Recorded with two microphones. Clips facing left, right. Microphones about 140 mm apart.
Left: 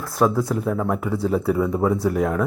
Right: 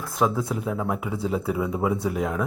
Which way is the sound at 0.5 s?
5° right (ahead or behind).